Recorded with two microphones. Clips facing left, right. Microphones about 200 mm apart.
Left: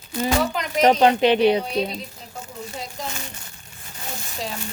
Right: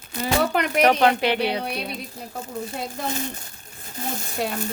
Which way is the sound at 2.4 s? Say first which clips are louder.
Right 3 dB; 55° right (ahead or behind).